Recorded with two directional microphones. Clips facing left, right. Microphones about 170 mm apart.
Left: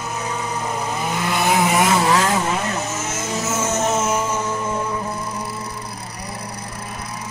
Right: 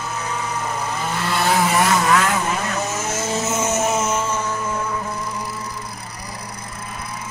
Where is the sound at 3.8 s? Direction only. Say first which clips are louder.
Left 1 dB; 5° left (ahead or behind).